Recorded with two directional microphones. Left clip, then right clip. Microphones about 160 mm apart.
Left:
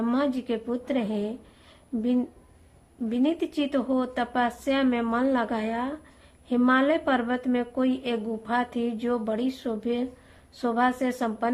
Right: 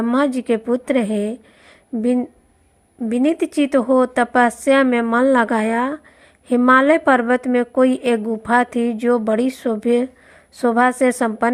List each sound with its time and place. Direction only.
0.1 s a woman's voice: 40° right (ahead or behind)
1.9 s speech: 20° right (ahead or behind)
3.1 s a woman's voice: 40° right (ahead or behind)